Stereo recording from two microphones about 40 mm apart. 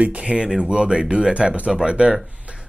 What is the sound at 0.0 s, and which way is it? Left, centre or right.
Speech, right.